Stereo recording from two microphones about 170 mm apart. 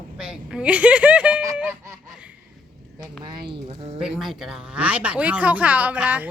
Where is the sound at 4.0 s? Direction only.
5° right (ahead or behind).